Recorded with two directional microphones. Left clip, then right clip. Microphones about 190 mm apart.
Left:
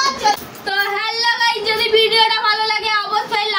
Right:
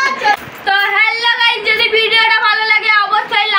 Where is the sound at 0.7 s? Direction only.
20° left (ahead or behind).